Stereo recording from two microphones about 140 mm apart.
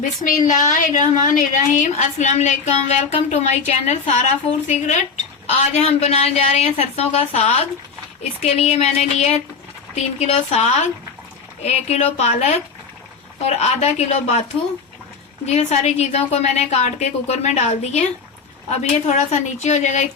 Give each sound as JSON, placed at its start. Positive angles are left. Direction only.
{"t": 0.0, "sound": "a woman's voice", "side_deg": 65}
{"t": 15.4, "sound": "a woman's voice", "side_deg": 55}